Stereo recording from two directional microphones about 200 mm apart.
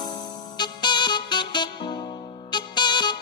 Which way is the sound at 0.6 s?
20° left (ahead or behind).